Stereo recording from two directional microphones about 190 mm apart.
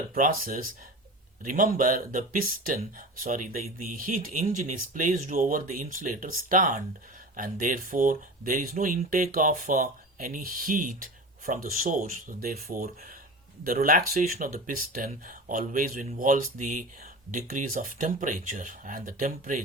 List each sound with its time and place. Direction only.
0.1 s speech: 50° right (ahead or behind)